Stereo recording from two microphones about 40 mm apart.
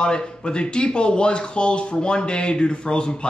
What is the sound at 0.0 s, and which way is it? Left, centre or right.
Speech, left.